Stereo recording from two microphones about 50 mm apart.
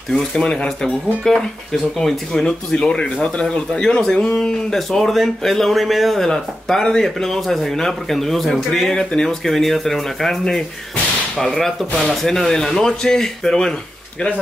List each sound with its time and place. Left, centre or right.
0.4 s a man's voice: centre